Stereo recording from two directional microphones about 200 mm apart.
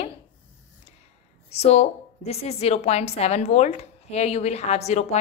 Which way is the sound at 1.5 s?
30° left (ahead or behind).